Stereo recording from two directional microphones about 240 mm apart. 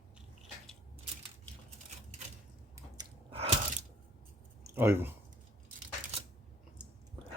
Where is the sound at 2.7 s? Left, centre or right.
Centre.